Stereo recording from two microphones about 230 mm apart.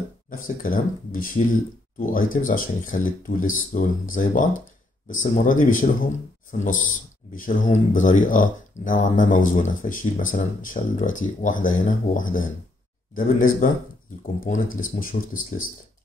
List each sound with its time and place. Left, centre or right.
0.3 s speech: left
7.3 s speech: left